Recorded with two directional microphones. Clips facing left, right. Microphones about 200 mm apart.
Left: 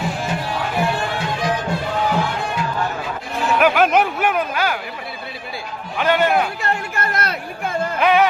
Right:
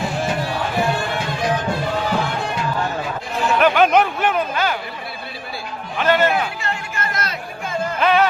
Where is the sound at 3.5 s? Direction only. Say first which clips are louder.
Right 1 dB; 5° left (ahead or behind).